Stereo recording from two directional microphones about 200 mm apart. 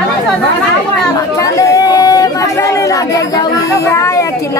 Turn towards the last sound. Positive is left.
turn(degrees=15)  # may be behind; listen again after turning